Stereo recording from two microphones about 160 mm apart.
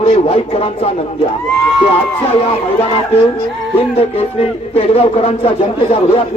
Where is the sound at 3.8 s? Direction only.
35° left (ahead or behind).